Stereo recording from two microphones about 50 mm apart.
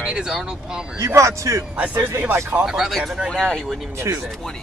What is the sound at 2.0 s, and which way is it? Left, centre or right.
Speech, right.